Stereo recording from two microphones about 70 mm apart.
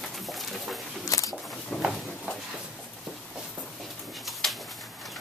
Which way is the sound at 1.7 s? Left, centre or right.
Left.